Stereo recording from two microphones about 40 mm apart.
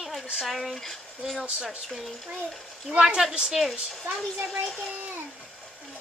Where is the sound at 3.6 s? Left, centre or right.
Centre.